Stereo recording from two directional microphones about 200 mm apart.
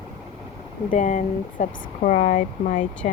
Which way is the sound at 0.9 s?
40° left (ahead or behind).